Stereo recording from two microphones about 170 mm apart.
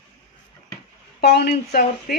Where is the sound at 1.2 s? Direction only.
70° left (ahead or behind).